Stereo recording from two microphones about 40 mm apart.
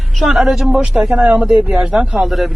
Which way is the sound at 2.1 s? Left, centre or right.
Centre.